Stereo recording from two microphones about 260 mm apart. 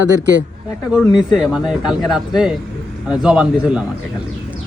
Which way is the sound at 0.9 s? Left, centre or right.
Centre.